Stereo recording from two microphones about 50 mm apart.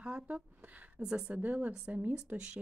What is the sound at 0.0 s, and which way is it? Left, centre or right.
A woman's voice, right.